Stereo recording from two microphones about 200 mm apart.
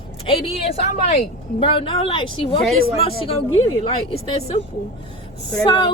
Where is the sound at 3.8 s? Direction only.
25° left (ahead or behind).